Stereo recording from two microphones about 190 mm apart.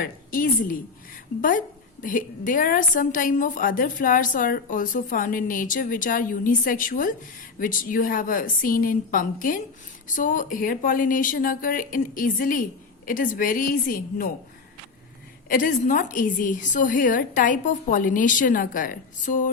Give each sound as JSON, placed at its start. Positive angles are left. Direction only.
{"t": 0.0, "sound": "a woman's voice", "side_deg": 45}
{"t": 15.4, "sound": "a woman's voice", "side_deg": 45}